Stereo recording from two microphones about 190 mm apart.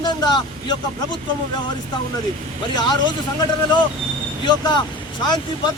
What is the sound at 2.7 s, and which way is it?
Speech, 25° left (ahead or behind).